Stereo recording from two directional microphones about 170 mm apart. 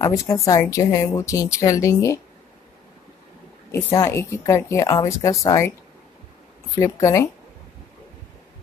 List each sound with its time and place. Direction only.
0.0 s a woman's voice: 15° left (ahead or behind)
3.7 s a woman's voice: 20° left (ahead or behind)
6.8 s a woman's voice: 15° left (ahead or behind)